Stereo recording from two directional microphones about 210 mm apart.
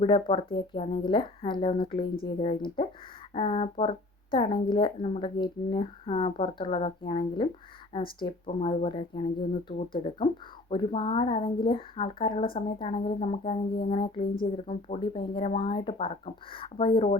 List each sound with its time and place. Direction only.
0.0 s a woman's voice: 25° left (ahead or behind)